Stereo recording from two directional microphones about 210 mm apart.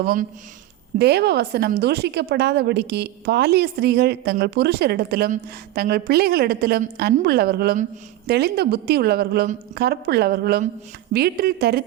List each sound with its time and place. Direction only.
0.0 s a woman's voice: 40° right (ahead or behind)
0.9 s a woman's voice: 50° right (ahead or behind)